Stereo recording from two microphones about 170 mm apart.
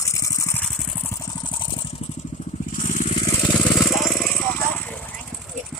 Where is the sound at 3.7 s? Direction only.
Centre (ahead or behind).